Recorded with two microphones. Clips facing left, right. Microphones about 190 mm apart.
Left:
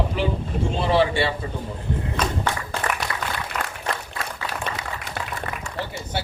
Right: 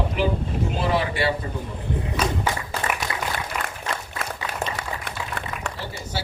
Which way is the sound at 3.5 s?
10° right (ahead or behind).